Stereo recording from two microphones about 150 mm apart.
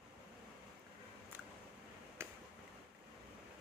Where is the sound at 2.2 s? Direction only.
15° right (ahead or behind).